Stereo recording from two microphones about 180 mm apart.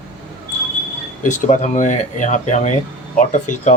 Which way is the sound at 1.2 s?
45° left (ahead or behind).